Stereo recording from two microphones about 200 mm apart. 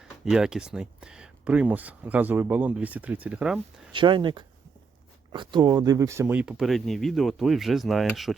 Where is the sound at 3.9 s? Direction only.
25° right (ahead or behind).